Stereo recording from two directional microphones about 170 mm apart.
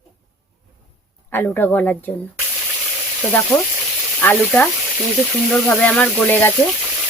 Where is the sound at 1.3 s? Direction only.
10° left (ahead or behind).